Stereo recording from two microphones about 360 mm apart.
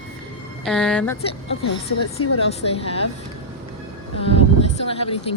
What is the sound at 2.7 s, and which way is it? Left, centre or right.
Speech, centre.